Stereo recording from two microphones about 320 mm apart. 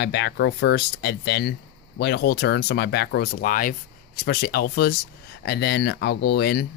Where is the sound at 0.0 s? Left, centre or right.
Left.